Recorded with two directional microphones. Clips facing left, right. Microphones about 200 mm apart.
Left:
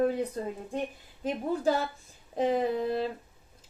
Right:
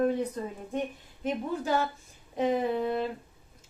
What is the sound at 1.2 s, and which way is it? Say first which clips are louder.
A woman's voice: left 3 dB; 35° left (ahead or behind).